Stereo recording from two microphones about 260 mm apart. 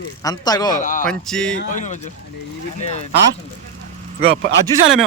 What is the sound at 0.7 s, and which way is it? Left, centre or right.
Speech, left.